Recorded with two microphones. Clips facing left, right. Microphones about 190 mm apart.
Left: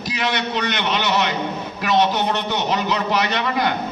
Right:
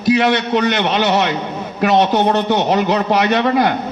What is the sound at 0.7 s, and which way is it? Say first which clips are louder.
Speech: right 6 dB; 50° right (ahead or behind).